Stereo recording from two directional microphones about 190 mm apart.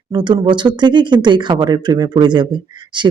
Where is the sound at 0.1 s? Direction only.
25° right (ahead or behind).